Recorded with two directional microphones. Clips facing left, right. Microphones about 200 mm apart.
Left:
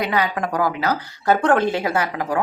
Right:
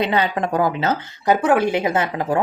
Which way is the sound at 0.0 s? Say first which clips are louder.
Right 2 dB; 25° right (ahead or behind).